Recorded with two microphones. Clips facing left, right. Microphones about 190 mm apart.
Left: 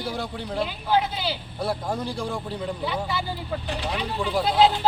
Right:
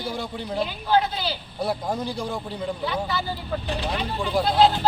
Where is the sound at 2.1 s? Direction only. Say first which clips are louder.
Even; centre (ahead or behind).